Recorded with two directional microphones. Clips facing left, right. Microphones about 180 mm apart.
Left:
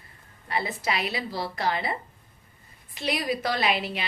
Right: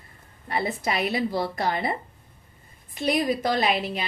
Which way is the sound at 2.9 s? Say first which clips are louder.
Right 4 dB; 50° right (ahead or behind).